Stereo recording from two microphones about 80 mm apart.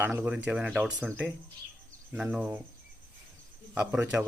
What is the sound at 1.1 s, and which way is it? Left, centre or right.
Speech, right.